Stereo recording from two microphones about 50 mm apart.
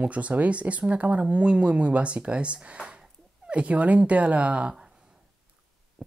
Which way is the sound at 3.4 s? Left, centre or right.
Right.